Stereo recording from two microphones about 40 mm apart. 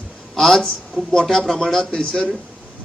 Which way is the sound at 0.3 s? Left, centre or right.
Centre.